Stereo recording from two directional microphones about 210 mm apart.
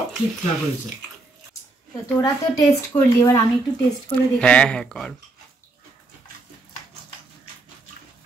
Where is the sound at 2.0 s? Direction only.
15° left (ahead or behind).